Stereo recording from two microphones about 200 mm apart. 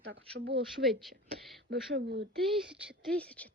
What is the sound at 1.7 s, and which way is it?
Speech, 55° right (ahead or behind).